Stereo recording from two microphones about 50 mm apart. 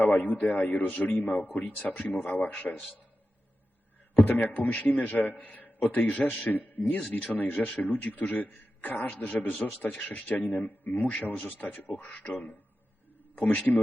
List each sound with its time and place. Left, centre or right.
0.0 s a man's voice: left
4.4 s a man's voice: left